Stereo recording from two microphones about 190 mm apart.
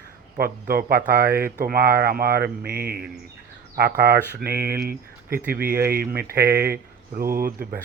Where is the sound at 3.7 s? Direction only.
55° right (ahead or behind).